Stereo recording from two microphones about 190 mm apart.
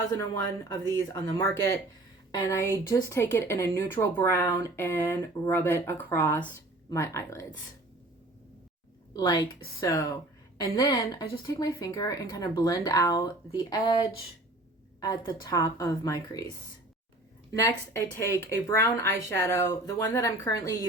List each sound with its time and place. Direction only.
0.9 s a woman's voice: 15° left (ahead or behind)
9.1 s a woman's voice: 20° left (ahead or behind)